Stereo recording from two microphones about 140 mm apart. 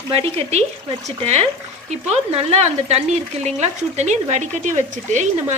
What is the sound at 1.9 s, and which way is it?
Speech, 50° right (ahead or behind).